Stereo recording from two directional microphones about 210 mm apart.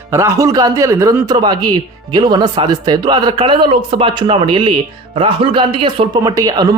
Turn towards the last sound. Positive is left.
turn(degrees=-20)  # may be behind; listen again after turning